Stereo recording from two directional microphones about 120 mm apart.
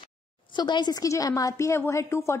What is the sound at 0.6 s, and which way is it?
A woman's voice, 35° left (ahead or behind).